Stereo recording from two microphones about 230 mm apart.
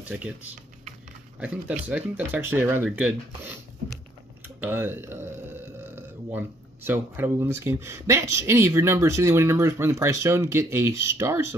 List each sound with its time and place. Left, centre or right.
1.4 s speech: centre
4.6 s speech: centre